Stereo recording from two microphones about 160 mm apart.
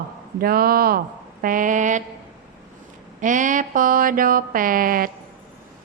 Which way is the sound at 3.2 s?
55° right (ahead or behind).